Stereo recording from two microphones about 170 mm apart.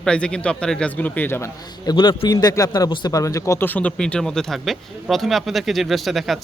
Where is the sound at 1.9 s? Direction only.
25° left (ahead or behind).